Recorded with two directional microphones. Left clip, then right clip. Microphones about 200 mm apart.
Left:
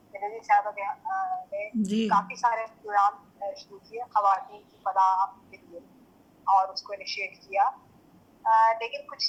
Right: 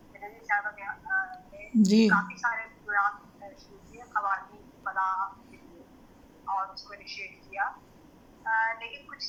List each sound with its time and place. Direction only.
0.2 s speech: 25° left (ahead or behind)
1.8 s a woman's voice: 15° left (ahead or behind)
2.2 s speech: 25° left (ahead or behind)
6.5 s speech: 20° left (ahead or behind)